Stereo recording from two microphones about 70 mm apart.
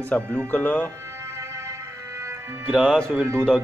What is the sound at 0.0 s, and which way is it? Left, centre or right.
Speech, left.